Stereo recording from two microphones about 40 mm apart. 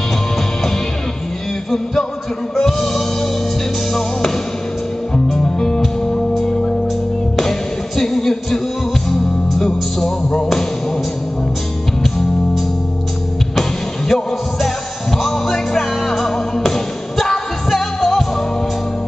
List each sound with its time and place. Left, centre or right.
2.5 s music: centre
5.4 s music: centre
7.3 s music: centre
13.6 s music: centre